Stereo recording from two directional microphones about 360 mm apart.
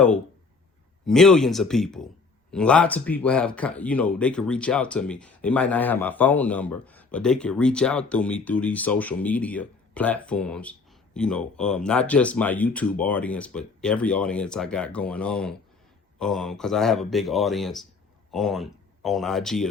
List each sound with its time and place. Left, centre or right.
1.0 s speech: centre